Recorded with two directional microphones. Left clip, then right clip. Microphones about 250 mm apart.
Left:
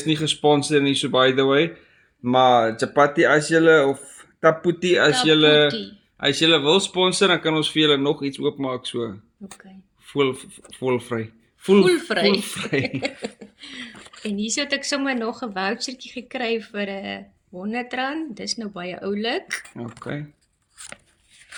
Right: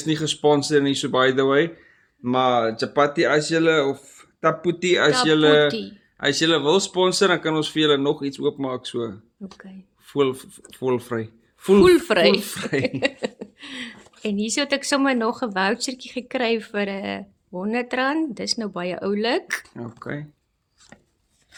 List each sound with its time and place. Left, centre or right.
0.0 s speech: centre
11.8 s speech: right
12.5 s speech: centre
13.0 s speech: right
20.0 s speech: centre